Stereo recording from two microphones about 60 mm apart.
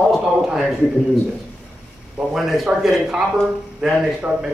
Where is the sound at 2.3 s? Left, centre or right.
Centre.